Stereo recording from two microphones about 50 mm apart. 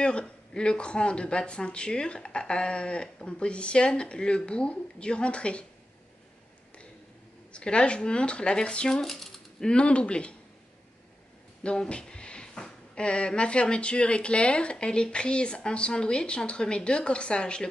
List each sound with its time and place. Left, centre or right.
0.0 s speech: centre
7.5 s speech: left
9.0 s typewriter: centre
9.7 s speech: left
11.6 s speech: centre